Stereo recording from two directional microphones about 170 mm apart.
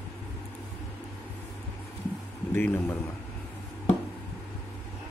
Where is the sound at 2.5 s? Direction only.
15° left (ahead or behind).